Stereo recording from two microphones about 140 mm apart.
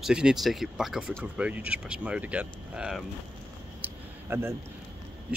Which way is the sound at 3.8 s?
15° right (ahead or behind).